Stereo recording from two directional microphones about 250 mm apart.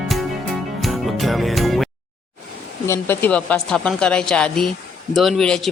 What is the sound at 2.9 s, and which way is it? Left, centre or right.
Speech, centre.